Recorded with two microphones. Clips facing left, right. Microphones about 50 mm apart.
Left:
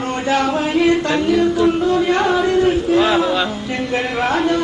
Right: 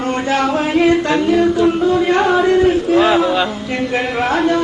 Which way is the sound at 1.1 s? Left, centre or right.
Centre.